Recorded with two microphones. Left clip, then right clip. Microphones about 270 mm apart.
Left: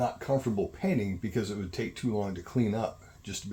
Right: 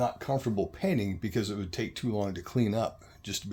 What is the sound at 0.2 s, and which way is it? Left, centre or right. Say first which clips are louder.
Speech: left 1 dB; right.